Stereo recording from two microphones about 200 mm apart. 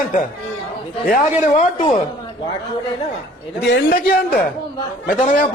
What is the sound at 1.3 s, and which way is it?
Speech, 35° left (ahead or behind).